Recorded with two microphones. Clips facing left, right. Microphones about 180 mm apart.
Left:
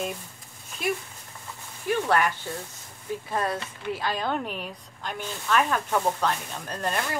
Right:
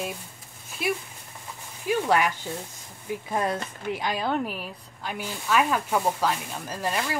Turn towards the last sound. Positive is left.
turn(degrees=-5)  # may be behind; listen again after turning